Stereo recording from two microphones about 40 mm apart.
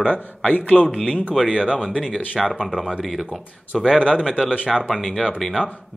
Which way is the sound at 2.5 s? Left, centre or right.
Centre.